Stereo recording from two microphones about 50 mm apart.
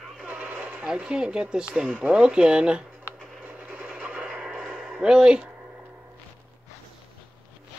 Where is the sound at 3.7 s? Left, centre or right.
Right.